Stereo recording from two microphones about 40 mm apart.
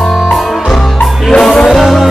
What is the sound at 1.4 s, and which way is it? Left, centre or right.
Music, centre.